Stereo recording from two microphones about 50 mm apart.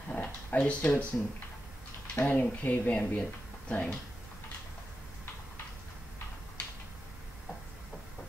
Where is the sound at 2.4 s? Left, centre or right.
Left.